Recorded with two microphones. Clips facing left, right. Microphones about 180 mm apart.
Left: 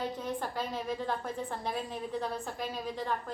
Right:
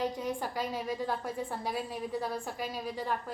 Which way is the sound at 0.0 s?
10° right (ahead or behind).